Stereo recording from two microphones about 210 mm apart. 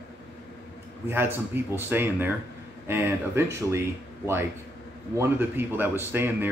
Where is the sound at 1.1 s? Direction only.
10° right (ahead or behind).